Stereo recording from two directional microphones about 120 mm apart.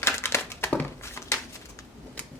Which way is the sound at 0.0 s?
20° left (ahead or behind).